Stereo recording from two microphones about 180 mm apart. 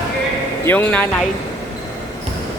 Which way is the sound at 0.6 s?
10° left (ahead or behind).